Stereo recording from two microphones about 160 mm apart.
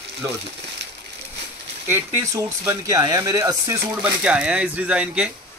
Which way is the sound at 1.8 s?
20° right (ahead or behind).